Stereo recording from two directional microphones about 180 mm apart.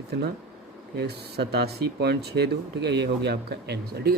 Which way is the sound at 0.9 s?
65° right (ahead or behind).